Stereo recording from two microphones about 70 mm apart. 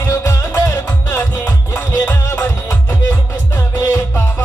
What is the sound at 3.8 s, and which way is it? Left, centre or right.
Music, left.